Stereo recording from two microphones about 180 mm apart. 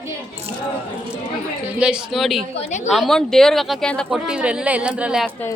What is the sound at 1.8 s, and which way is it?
Speech, 5° right (ahead or behind).